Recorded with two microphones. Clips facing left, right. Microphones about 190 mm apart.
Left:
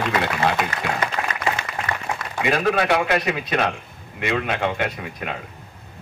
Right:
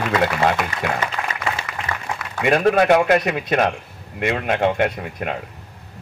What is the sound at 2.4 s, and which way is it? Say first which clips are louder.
A man's voice: right 5 dB; 45° right (ahead or behind).